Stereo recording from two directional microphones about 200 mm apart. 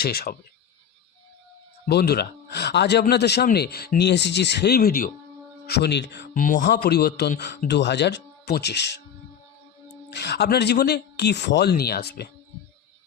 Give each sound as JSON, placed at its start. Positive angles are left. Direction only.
{"t": 0.0, "sound": "speech", "side_deg": 50}
{"t": 1.9, "sound": "speech", "side_deg": 55}
{"t": 6.6, "sound": "speech", "side_deg": 55}
{"t": 10.1, "sound": "speech", "side_deg": 55}